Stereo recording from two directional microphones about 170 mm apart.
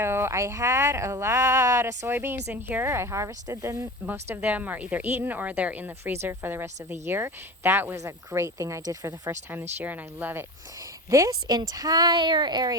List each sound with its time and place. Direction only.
0.0 s speech: 15° right (ahead or behind)